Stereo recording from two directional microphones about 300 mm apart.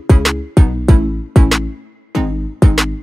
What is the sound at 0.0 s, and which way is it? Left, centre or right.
Music, centre.